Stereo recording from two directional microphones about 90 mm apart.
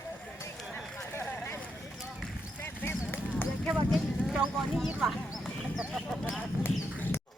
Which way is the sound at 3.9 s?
5° right (ahead or behind).